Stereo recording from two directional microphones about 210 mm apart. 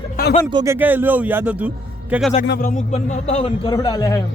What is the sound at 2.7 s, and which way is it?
Speech, 35° left (ahead or behind).